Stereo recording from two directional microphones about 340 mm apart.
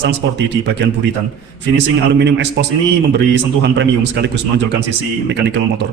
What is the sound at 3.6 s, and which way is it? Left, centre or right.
A man's voice, right.